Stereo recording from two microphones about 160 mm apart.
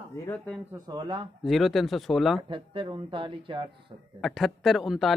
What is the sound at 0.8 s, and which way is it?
Speech, 30° right (ahead or behind).